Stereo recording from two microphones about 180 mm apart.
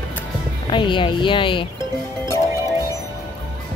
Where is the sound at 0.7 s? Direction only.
25° left (ahead or behind).